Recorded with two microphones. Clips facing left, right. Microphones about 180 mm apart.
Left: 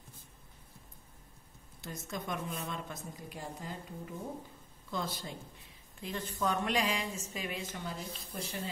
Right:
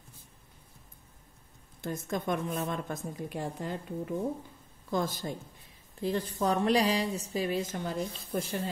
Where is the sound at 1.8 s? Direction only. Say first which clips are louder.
Right 8 dB; 50° right (ahead or behind).